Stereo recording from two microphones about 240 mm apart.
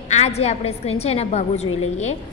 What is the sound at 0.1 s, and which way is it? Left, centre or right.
A woman's voice, left.